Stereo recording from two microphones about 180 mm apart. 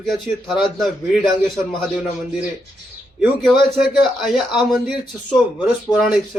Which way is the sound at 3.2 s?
5° right (ahead or behind).